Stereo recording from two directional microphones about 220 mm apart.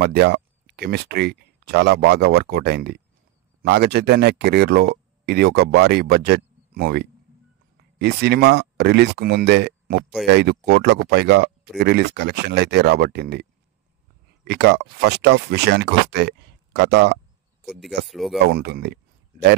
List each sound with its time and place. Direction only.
0.0 s speech: 50° right (ahead or behind)
17.6 s speech: centre (ahead or behind)
18.4 s speech: 45° right (ahead or behind)